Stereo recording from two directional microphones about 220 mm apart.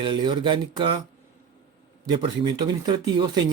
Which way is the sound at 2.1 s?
20° right (ahead or behind).